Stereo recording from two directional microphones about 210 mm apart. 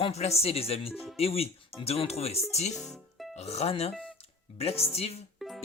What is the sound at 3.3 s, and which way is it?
Speech, 30° left (ahead or behind).